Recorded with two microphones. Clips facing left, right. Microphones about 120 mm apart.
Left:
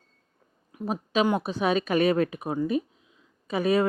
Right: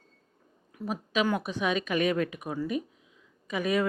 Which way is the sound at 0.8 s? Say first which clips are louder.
Left 4 dB; 30° left (ahead or behind).